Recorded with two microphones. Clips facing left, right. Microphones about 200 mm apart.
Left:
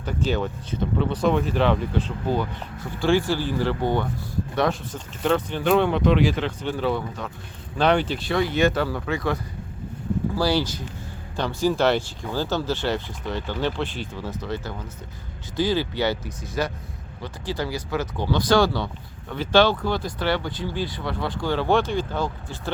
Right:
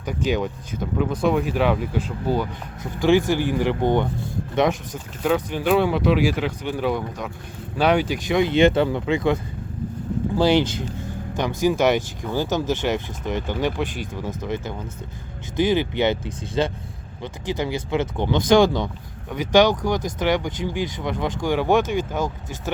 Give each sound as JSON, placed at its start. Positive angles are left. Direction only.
{"t": 0.0, "sound": "speech", "side_deg": -15}
{"t": 5.2, "sound": "speech", "side_deg": -10}